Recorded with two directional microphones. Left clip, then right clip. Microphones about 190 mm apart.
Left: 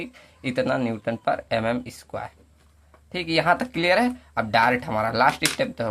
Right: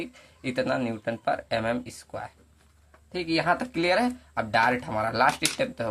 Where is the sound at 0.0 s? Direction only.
20° left (ahead or behind).